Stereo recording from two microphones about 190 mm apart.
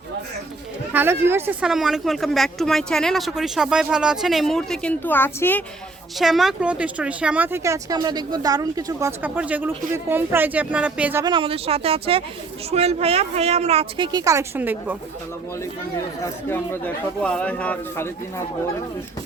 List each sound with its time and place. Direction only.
0.9 s speech: 10° right (ahead or behind); by 5.6 s 10° left (ahead or behind)
6.1 s speech: centre (ahead or behind)
11.2 s a woman's voice: 25° right (ahead or behind); by 14.9 s 10° right (ahead or behind)
16.2 s speech: 10° left (ahead or behind)